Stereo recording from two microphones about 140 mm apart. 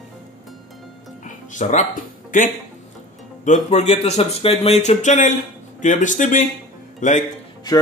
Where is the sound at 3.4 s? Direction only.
55° left (ahead or behind).